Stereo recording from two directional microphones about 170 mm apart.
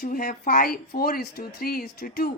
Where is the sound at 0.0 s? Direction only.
55° left (ahead or behind).